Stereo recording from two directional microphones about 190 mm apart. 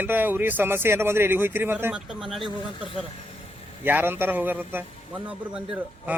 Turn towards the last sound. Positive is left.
turn(degrees=-5)  # may be behind; listen again after turning